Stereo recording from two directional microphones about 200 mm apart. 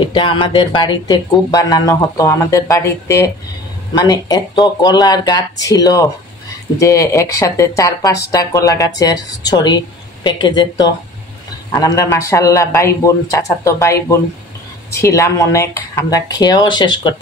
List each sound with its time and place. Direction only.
0.0 s speech: 25° left (ahead or behind)